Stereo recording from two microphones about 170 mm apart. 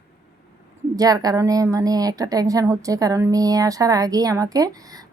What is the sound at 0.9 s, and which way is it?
A woman's voice, 20° right (ahead or behind).